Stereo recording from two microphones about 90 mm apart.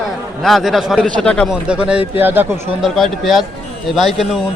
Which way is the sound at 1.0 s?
10° left (ahead or behind).